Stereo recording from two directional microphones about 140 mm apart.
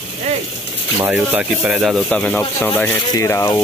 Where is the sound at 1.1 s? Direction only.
10° right (ahead or behind).